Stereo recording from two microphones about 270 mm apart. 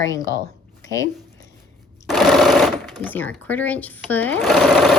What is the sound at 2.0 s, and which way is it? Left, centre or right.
Speech, centre.